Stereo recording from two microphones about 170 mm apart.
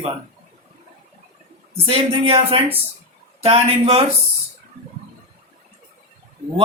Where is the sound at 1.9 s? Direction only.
35° right (ahead or behind).